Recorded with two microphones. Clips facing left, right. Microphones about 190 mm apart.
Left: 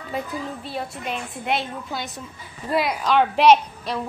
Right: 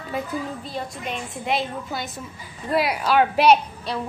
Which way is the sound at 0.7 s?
5° left (ahead or behind).